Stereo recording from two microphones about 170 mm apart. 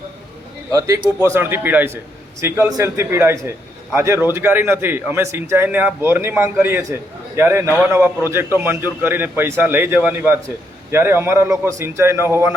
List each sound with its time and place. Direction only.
0.7 s a man's voice: 20° right (ahead or behind)